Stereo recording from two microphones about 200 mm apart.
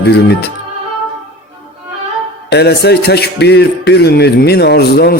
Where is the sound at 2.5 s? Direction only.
55° left (ahead or behind).